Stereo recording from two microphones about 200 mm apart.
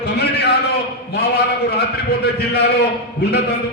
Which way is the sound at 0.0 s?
55° left (ahead or behind).